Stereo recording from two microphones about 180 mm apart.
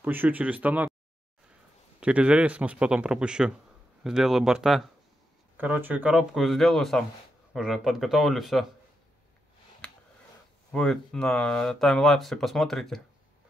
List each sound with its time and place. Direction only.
0.0 s speech: 10° right (ahead or behind)
2.0 s speech: 5° right (ahead or behind)
10.7 s speech: 5° left (ahead or behind)